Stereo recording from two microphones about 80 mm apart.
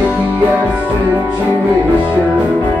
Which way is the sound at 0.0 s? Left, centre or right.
Centre.